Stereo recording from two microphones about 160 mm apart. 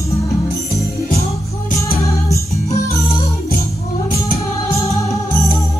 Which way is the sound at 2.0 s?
20° left (ahead or behind).